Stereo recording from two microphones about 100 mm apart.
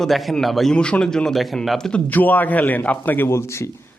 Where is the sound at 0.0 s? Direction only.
Centre (ahead or behind).